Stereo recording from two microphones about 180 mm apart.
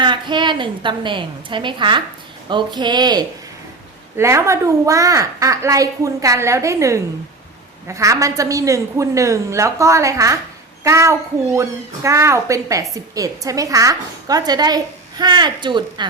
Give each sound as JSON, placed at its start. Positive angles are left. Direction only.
{"t": 0.0, "sound": "a woman's voice", "side_deg": -25}